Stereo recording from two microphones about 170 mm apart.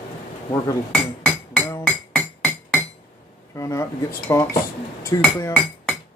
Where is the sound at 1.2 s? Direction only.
15° left (ahead or behind).